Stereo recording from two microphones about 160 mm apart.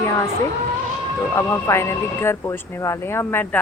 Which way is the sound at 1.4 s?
15° left (ahead or behind).